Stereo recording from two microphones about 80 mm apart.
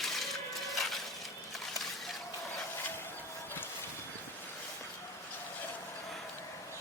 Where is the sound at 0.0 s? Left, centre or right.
Centre.